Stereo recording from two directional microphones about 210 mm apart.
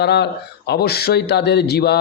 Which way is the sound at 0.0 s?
50° left (ahead or behind).